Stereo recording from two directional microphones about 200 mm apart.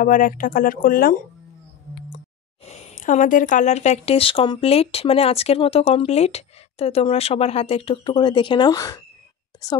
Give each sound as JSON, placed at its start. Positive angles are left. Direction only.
{"t": 0.0, "sound": "speech", "side_deg": 45}
{"t": 2.6, "sound": "speech", "side_deg": 35}